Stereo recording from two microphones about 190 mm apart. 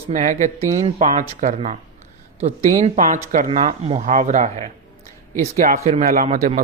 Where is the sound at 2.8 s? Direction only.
35° right (ahead or behind).